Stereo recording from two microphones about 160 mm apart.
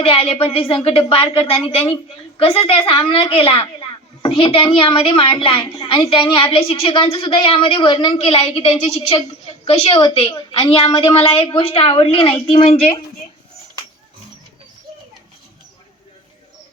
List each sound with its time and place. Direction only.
0.0 s a woman's voice: 35° left (ahead or behind)